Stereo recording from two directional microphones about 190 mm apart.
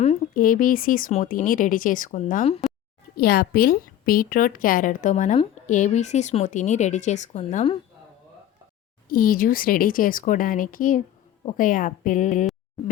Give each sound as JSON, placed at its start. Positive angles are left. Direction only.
{"t": 0.0, "sound": "speech", "side_deg": 40}
{"t": 3.2, "sound": "a woman's voice", "side_deg": 55}
{"t": 9.0, "sound": "speech", "side_deg": 50}